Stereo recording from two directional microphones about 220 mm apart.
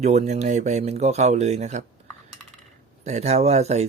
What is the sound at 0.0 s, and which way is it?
Speech, 30° right (ahead or behind).